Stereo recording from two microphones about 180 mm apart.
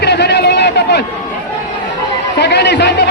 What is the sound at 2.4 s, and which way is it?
Speech, 65° left (ahead or behind).